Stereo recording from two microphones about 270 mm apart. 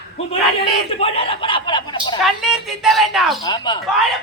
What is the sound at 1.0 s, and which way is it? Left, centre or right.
Chuckle, left.